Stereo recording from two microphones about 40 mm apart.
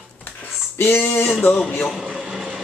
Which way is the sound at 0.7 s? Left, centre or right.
Left.